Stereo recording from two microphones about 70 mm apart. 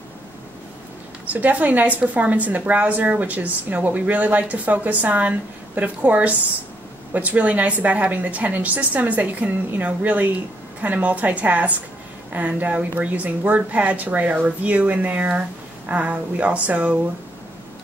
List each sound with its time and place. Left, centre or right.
1.2 s a woman's voice: right